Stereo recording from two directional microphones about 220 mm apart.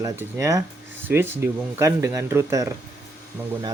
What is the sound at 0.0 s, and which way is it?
Speech, 15° right (ahead or behind).